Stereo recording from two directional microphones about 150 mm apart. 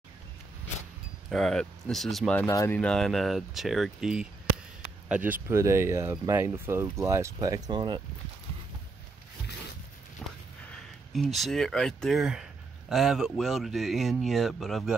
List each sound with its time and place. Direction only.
1.3 s speech: 5° left (ahead or behind)
2.5 s speech: 20° left (ahead or behind)
2.8 s speech: 5° left (ahead or behind); by 8.0 s 30° right (ahead or behind)
10.2 s a sound: 5° left (ahead or behind)
11.1 s speech: centre (ahead or behind)